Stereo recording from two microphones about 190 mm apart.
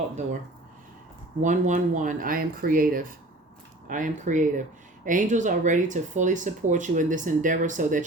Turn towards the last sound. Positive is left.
turn(degrees=-40)  # may be behind; listen again after turning